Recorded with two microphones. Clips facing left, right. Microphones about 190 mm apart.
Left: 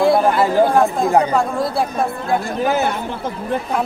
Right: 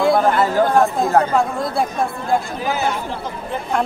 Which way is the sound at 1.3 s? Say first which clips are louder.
Left 1 dB; centre (ahead or behind).